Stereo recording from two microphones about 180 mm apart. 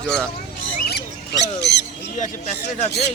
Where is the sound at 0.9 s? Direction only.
65° left (ahead or behind).